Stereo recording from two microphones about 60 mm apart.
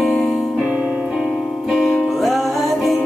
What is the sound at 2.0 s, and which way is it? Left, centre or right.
Music, centre.